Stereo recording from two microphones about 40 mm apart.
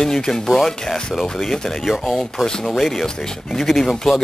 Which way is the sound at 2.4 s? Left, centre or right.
Centre.